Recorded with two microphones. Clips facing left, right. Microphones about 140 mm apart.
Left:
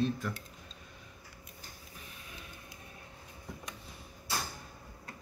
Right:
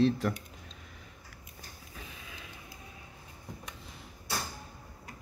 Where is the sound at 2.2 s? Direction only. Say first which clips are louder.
Right 1 dB; 90° right.